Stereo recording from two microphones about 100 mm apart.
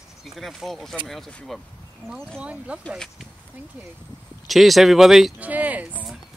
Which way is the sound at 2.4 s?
10° right (ahead or behind).